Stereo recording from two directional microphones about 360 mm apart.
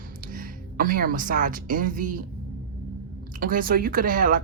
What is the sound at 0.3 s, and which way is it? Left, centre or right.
A woman's voice, right.